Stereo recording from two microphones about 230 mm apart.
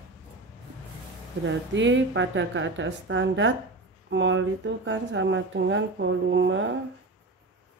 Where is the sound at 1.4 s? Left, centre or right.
Right.